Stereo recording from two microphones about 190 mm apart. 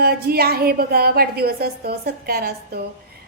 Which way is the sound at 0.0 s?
55° right (ahead or behind).